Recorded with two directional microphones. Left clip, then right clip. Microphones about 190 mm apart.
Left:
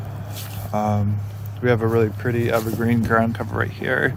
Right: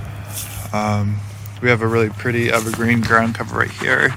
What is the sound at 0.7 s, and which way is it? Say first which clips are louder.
Speech: right 2 dB; 5° right (ahead or behind).